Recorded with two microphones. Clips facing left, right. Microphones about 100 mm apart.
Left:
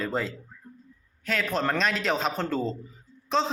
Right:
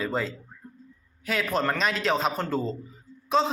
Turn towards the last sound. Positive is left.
turn(degrees=-5)  # may be behind; listen again after turning